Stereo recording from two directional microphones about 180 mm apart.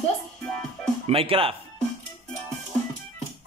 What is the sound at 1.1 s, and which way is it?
Speech, 30° right (ahead or behind).